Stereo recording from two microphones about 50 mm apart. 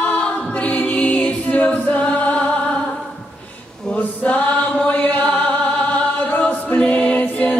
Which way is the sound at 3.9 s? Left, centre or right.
Left.